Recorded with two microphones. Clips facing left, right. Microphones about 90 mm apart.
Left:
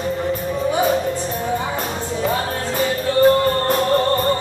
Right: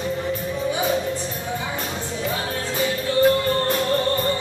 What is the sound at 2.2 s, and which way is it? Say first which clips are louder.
Music: left 6 dB; 45° left (ahead or behind).